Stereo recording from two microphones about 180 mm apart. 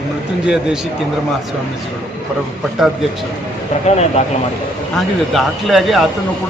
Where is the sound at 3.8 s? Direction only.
35° left (ahead or behind).